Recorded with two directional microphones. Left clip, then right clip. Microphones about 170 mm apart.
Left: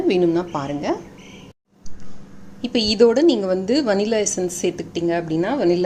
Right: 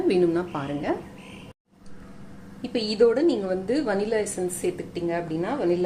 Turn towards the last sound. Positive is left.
turn(degrees=65)  # may be behind; listen again after turning